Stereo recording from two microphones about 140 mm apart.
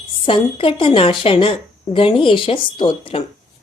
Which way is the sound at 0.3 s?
40° left (ahead or behind).